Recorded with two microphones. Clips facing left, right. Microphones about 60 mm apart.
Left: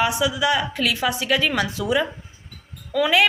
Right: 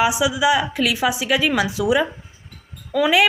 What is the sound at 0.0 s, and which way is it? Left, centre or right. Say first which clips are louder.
A woman's voice: right 3 dB; centre.